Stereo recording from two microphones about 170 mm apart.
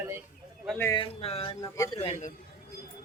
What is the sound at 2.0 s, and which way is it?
Speech, 35° left (ahead or behind).